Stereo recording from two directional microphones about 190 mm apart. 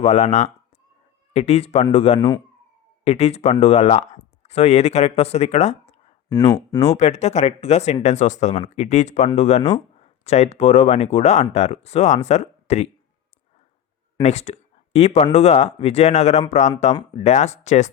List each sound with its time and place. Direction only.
0.0 s speech: 35° left (ahead or behind)
6.3 s speech: 20° left (ahead or behind)
6.9 s speech: 35° left (ahead or behind)
14.2 s speech: 35° left (ahead or behind)